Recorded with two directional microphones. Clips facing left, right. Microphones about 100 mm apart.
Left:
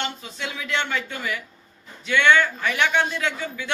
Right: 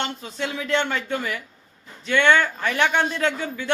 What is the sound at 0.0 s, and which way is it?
A man's voice, 35° right (ahead or behind).